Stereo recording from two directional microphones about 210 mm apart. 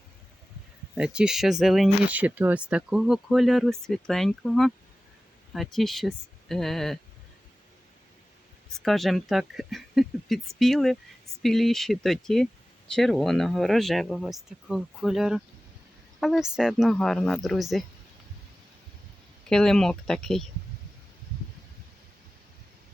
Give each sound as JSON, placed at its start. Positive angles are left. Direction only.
{"t": 0.9, "sound": "speech", "side_deg": -5}
{"t": 8.7, "sound": "speech", "side_deg": 0}
{"t": 19.5, "sound": "speech", "side_deg": 0}